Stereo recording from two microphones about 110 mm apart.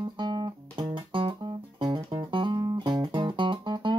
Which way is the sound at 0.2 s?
45° right (ahead or behind).